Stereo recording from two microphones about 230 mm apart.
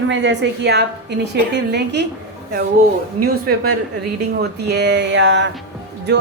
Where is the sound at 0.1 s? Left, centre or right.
Right.